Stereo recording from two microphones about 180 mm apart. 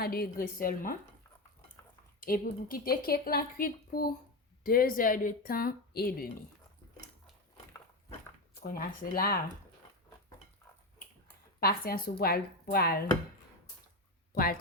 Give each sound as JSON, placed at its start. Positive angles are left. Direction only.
{"t": 0.0, "sound": "a woman's voice", "side_deg": 55}
{"t": 2.2, "sound": "a woman's voice", "side_deg": 55}
{"t": 8.6, "sound": "a woman's voice", "side_deg": 55}
{"t": 11.6, "sound": "speech", "side_deg": 55}